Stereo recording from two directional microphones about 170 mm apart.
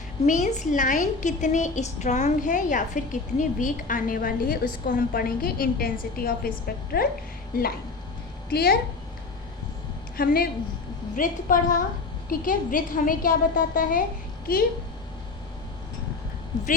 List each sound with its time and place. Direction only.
0.3 s a woman's voice: 45° left (ahead or behind); by 8.8 s 65° left (ahead or behind)
10.2 s a woman's voice: 60° left (ahead or behind)